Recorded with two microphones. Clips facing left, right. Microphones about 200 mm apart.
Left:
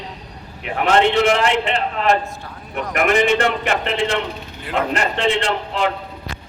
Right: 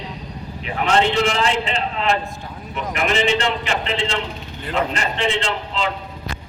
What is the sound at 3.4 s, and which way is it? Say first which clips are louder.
A man's voice: left 3 dB; 55° left (ahead or behind).